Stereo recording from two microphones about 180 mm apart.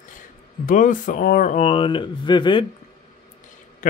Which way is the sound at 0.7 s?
45° left (ahead or behind).